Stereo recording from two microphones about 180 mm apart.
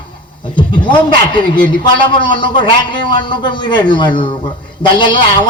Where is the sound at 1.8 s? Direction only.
25° left (ahead or behind).